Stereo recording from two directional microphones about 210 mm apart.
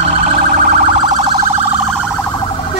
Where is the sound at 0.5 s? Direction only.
35° right (ahead or behind).